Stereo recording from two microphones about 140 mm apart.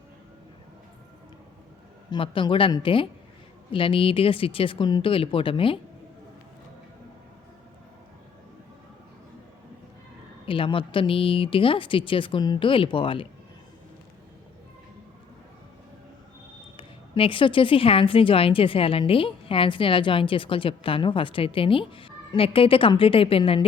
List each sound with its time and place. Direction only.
2.0 s a woman's voice: 40° left (ahead or behind)
10.4 s a woman's voice: 40° left (ahead or behind)
16.7 s a woman's voice: 40° left (ahead or behind)